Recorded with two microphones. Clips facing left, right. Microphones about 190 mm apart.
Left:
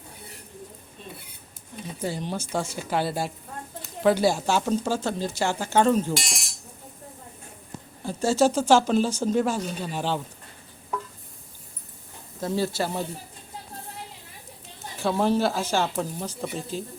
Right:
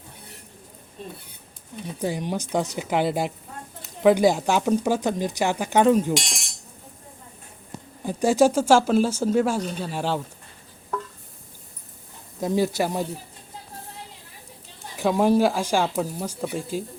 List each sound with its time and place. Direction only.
2.0 s speech: 15° right (ahead or behind)
6.1 s chink: centre (ahead or behind)
8.0 s speech: 15° right (ahead or behind)
12.4 s speech: 15° right (ahead or behind)
14.9 s speech: 15° right (ahead or behind)